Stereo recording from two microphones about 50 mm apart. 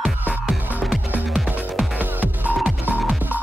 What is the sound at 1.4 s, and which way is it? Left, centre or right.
Music, right.